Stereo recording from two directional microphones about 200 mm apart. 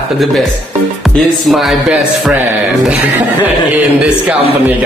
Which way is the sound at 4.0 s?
5° right (ahead or behind).